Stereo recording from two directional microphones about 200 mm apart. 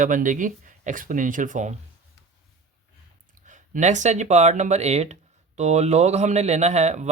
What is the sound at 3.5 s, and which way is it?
Speech, 40° right (ahead or behind).